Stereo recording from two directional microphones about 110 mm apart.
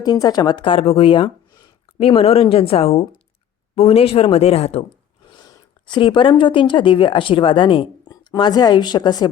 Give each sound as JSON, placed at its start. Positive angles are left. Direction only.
{"t": 0.0, "sound": "speech", "side_deg": 35}
{"t": 2.0, "sound": "speech", "side_deg": 65}
{"t": 5.4, "sound": "speech", "side_deg": 45}